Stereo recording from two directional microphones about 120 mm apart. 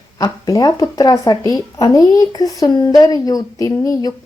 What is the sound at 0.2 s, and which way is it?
Speech, 30° left (ahead or behind).